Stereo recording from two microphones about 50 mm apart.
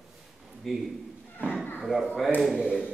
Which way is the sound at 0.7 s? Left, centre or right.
Centre.